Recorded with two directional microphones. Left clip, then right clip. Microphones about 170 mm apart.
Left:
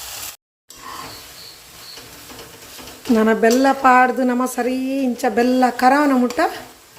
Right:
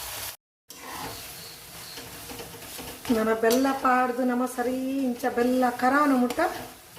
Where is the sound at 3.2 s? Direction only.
50° left (ahead or behind).